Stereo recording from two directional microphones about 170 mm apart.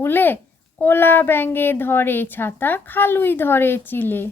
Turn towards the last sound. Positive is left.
turn(degrees=10)  # may be behind; listen again after turning